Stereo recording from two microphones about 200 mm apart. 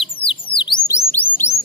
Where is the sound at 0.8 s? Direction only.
15° left (ahead or behind).